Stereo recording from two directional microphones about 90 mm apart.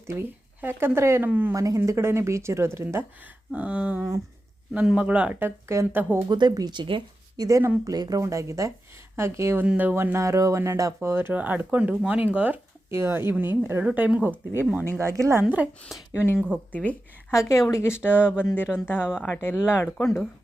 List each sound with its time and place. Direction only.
0.1 s speech: 25° right (ahead or behind)
1.5 s speech: 40° right (ahead or behind)
3.5 s speech: 15° right (ahead or behind)
5.4 s speech: 30° right (ahead or behind)
6.2 s speech: 55° right (ahead or behind)
7.3 s speech: 40° right (ahead or behind)
8.2 s speech: 35° right (ahead or behind)
9.6 s speech: 20° right (ahead or behind)
12.9 s speech: 30° right (ahead or behind)
14.9 s speech: 30° right (ahead or behind)
15.4 s speech: 15° right (ahead or behind)
16.1 s a woman's voice: 25° left (ahead or behind)